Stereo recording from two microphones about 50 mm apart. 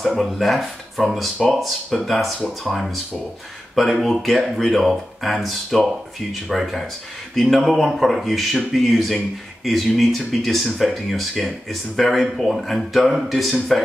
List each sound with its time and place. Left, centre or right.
0.1 s speech: centre
3.7 s speech: centre